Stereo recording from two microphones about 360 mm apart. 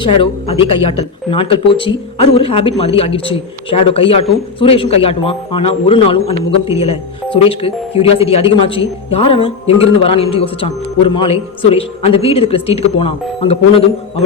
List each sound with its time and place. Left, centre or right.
0.0 s speech: centre
7.3 s speech: centre